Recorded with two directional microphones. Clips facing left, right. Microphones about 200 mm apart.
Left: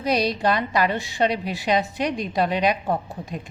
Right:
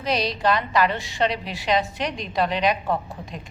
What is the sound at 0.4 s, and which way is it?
A woman's voice, 45° left (ahead or behind).